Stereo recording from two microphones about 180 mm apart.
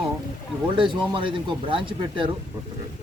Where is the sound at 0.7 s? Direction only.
25° right (ahead or behind).